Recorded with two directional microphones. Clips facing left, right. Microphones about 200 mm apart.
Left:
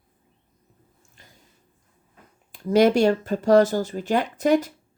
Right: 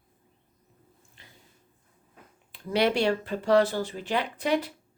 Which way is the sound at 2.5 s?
45° left (ahead or behind).